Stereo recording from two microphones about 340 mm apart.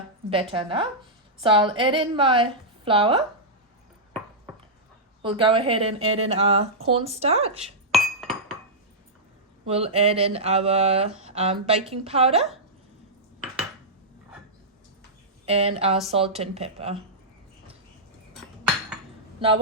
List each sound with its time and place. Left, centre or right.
0.3 s speech: centre
5.2 s speech: centre
7.9 s glass: centre
9.6 s speech: centre
15.4 s speech: centre
19.4 s speech: centre